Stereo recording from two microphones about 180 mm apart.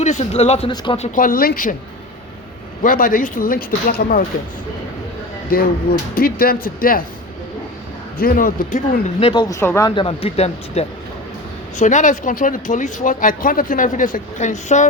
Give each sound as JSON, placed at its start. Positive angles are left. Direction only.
{"t": 0.0, "sound": "speech", "side_deg": 40}
{"t": 2.8, "sound": "speech", "side_deg": 50}
{"t": 5.5, "sound": "speech", "side_deg": 55}
{"t": 8.2, "sound": "speech", "side_deg": 50}
{"t": 9.3, "sound": "speech", "side_deg": 20}
{"t": 9.9, "sound": "speech", "side_deg": 30}